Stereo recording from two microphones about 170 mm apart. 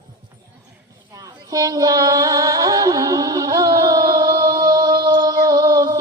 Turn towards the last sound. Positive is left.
turn(degrees=-20)  # may be behind; listen again after turning